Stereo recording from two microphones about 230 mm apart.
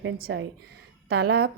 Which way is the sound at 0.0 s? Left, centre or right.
Right.